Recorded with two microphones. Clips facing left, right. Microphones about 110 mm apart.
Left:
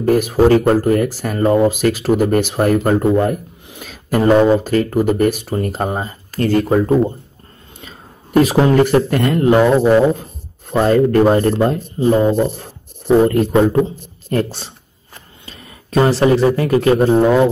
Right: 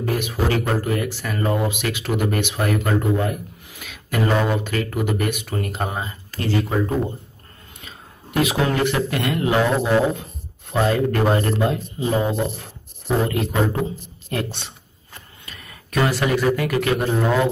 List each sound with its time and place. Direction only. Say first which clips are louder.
0.0 s speech: left 10 dB; 40° left (ahead or behind)
3.6 s speech: left 5 dB; 30° left (ahead or behind); by 6.8 s 50° left (ahead or behind)
7.8 s speech: left 3 dB; 35° left (ahead or behind)
15.4 s a man's voice: left 3 dB; 30° left (ahead or behind)